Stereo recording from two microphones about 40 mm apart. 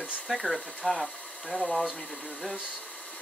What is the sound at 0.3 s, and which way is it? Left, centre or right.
Speech, centre.